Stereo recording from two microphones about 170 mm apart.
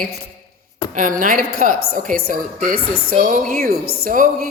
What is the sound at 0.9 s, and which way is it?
A woman's voice, 50° right (ahead or behind).